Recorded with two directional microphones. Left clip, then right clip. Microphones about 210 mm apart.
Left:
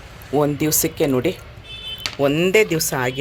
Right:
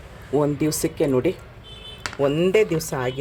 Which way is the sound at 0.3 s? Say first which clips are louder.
Left 3 dB; centre (ahead or behind).